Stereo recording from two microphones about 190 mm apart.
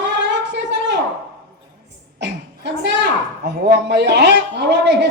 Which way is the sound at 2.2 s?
65° right (ahead or behind).